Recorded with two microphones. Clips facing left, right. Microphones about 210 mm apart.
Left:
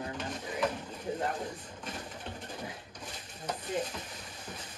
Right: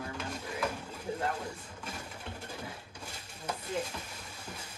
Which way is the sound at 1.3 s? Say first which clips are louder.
Left 1 dB; 10° right (ahead or behind).